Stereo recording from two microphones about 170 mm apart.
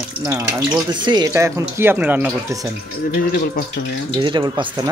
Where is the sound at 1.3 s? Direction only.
15° right (ahead or behind).